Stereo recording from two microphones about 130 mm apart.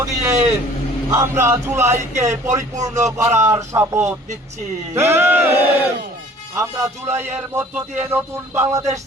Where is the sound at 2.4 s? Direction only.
65° right (ahead or behind).